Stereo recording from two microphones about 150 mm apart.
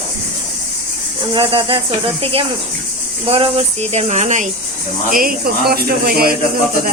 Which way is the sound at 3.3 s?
40° right (ahead or behind).